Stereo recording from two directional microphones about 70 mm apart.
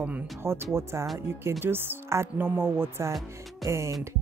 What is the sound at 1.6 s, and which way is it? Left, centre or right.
Speech, right.